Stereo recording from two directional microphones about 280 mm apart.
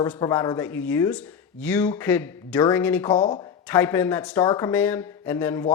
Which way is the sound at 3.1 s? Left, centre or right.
Centre.